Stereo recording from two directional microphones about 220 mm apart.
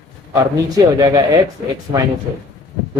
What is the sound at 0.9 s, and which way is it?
Speech, 15° right (ahead or behind).